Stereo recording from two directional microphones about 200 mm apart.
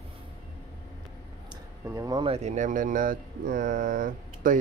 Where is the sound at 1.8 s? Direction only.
15° right (ahead or behind); by 4.6 s 45° right (ahead or behind).